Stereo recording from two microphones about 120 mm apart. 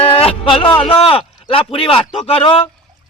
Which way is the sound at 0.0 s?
50° left (ahead or behind).